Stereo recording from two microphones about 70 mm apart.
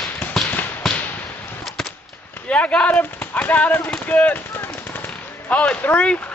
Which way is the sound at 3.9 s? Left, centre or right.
Centre.